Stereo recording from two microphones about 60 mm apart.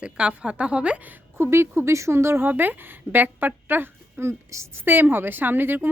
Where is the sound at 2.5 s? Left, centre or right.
Right.